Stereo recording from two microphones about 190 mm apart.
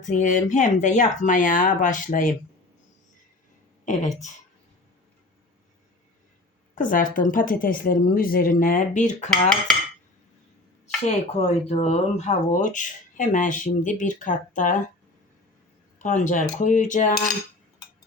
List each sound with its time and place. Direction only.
0.0 s speech: 40° left (ahead or behind)
3.8 s speech: 40° left (ahead or behind)
6.7 s speech: 45° left (ahead or behind)
11.0 s speech: 35° left (ahead or behind)
16.0 s speech: 40° left (ahead or behind)